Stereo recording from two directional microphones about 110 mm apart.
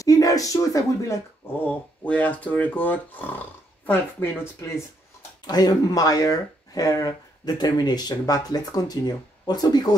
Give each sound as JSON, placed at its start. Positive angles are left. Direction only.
{"t": 0.0, "sound": "speech", "side_deg": 30}
{"t": 1.6, "sound": "speech", "side_deg": 15}
{"t": 5.5, "sound": "speech", "side_deg": 35}